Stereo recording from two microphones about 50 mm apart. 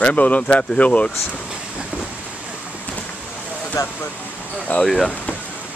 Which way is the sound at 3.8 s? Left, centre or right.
Left.